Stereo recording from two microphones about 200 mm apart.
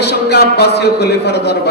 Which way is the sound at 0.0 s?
55° left (ahead or behind).